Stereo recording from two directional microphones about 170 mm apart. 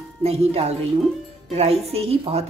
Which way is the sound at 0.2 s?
35° right (ahead or behind).